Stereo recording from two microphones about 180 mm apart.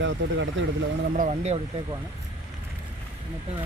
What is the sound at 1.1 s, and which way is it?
Speech, 45° right (ahead or behind).